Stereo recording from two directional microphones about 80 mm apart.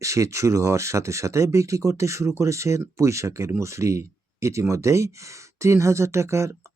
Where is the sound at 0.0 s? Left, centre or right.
Right.